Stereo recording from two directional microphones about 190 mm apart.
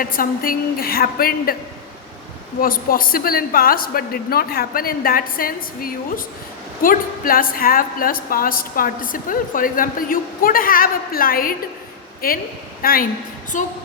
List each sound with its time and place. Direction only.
0.0 s a woman's voice: 50° left (ahead or behind)
2.6 s a woman's voice: 50° left (ahead or behind)
13.5 s music: 40° left (ahead or behind)